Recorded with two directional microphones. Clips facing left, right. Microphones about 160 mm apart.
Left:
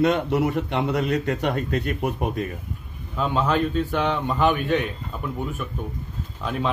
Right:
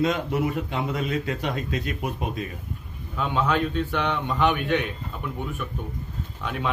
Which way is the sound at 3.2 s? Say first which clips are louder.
Left 2 dB; 40° left (ahead or behind).